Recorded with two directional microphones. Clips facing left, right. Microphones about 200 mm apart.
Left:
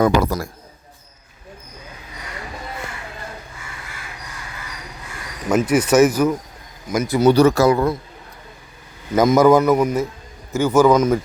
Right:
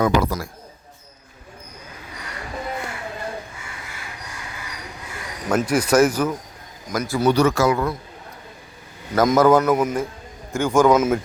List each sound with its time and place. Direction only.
0.2 s speech: 40° left (ahead or behind)
5.5 s speech: 5° left (ahead or behind)
7.3 s speech: 35° left (ahead or behind)
9.2 s a man's voice: 10° left (ahead or behind)